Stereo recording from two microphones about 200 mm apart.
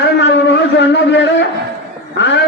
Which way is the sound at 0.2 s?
60° left (ahead or behind).